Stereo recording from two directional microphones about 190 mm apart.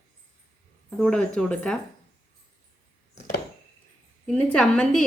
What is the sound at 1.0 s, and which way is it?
Speech, 5° left (ahead or behind).